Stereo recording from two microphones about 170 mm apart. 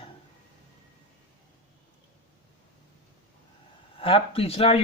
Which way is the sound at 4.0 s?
30° left (ahead or behind).